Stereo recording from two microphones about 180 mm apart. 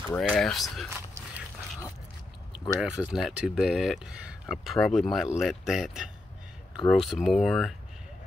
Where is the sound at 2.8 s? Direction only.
5° right (ahead or behind).